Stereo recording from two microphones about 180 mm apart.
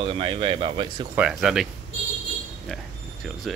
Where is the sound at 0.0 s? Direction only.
30° right (ahead or behind).